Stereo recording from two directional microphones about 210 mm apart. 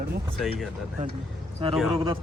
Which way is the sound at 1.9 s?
25° right (ahead or behind).